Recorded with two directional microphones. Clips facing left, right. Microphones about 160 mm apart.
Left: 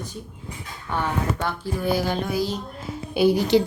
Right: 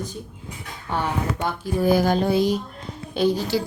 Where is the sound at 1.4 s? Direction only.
15° right (ahead or behind).